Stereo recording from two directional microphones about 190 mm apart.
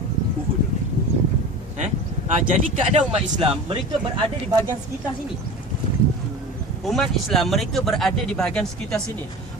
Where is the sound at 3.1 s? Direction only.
30° right (ahead or behind).